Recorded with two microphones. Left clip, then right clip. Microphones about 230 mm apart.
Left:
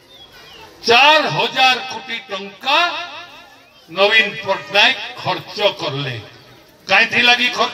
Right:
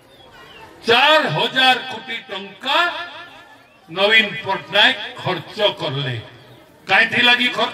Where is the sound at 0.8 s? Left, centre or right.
Right.